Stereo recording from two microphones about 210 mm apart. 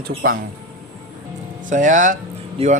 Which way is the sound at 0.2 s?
45° right (ahead or behind).